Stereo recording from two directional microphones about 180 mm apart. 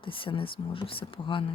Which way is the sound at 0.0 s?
30° left (ahead or behind).